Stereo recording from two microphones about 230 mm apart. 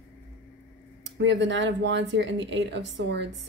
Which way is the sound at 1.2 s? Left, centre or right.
Right.